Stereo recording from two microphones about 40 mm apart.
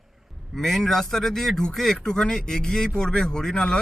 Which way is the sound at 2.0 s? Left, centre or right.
Centre.